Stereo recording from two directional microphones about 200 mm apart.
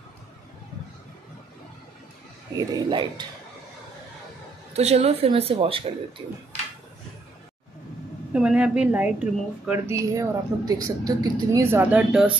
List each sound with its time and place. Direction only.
2.5 s speech: 20° right (ahead or behind)
4.7 s speech: 30° right (ahead or behind)
8.3 s speech: 5° right (ahead or behind)